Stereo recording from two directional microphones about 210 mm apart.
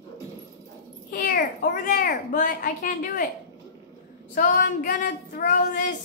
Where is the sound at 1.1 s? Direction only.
40° left (ahead or behind).